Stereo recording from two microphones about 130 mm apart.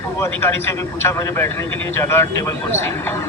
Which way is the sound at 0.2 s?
15° left (ahead or behind).